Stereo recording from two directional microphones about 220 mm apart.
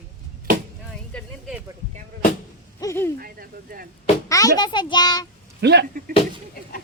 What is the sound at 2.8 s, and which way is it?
Speech, 10° left (ahead or behind).